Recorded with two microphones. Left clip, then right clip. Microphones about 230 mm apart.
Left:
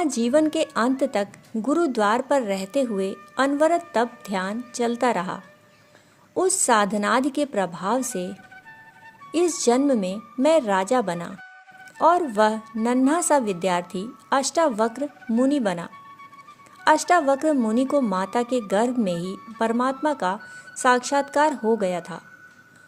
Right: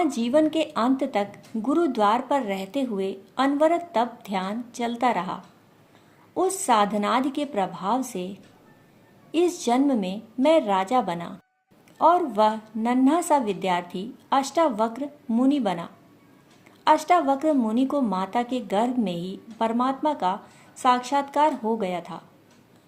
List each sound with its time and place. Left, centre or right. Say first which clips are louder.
0.0 s a woman's voice: left 1 dB; left